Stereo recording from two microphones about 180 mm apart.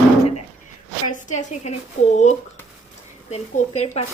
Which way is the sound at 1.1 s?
40° left (ahead or behind).